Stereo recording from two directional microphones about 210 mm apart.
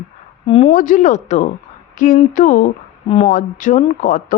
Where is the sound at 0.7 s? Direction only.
40° left (ahead or behind).